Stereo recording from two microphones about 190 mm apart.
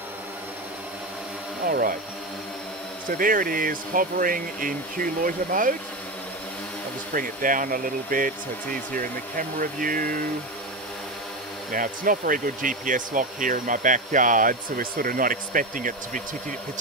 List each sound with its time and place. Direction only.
1.7 s speech: 50° right (ahead or behind)
3.1 s speech: 45° right (ahead or behind)
7.2 s speech: 45° right (ahead or behind)
11.7 s speech: 45° right (ahead or behind)